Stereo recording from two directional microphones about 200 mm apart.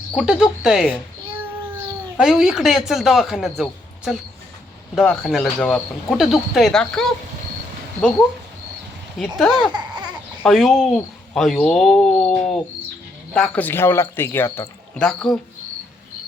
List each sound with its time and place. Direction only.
0.1 s speech: centre (ahead or behind)
9.4 s speech: centre (ahead or behind)
9.7 s babbling: 20° right (ahead or behind)
10.4 s speech: centre (ahead or behind)